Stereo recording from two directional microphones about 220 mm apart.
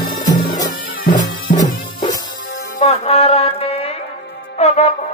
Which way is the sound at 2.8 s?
25° left (ahead or behind).